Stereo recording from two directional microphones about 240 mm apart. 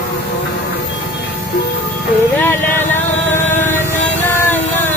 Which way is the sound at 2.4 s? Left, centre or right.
Centre.